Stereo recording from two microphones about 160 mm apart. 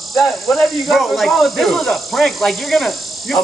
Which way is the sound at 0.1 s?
Centre (ahead or behind).